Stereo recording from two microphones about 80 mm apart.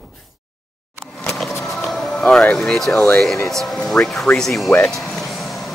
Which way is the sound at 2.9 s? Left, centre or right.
Centre.